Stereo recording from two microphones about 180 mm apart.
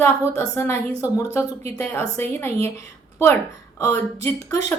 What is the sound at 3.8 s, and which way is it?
Speech, 15° left (ahead or behind).